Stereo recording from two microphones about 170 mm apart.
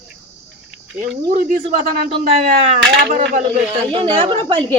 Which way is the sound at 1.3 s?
50° right (ahead or behind).